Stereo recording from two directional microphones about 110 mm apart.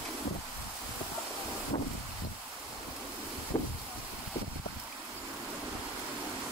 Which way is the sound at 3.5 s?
40° left (ahead or behind).